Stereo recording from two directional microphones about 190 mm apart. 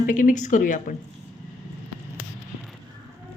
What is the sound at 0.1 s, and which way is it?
Speech, 45° left (ahead or behind).